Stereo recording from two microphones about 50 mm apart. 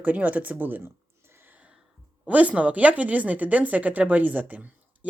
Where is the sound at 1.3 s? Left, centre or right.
Right.